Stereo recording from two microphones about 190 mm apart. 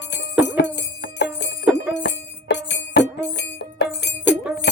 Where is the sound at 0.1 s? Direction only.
70° left (ahead or behind).